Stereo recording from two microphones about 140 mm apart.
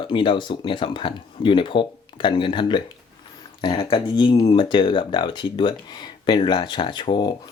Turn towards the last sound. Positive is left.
turn(degrees=35)  # may be behind; listen again after turning